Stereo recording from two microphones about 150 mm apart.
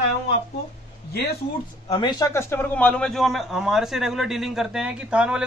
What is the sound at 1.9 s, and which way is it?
A man's voice, 25° left (ahead or behind).